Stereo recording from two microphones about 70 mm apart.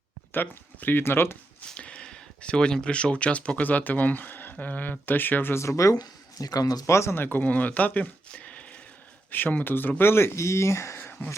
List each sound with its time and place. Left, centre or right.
0.3 s speech: left
1.6 s speech: centre
5.6 s speech: left
6.8 s speech: left